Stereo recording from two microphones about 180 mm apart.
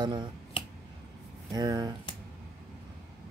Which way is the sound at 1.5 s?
20° right (ahead or behind).